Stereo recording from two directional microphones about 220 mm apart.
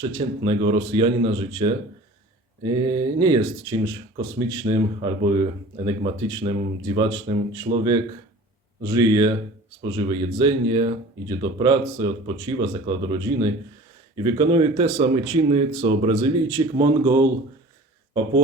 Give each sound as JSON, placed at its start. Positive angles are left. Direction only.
{"t": 0.0, "sound": "speech", "side_deg": -20}